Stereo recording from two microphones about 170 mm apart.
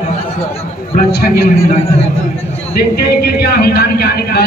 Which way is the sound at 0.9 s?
65° left (ahead or behind).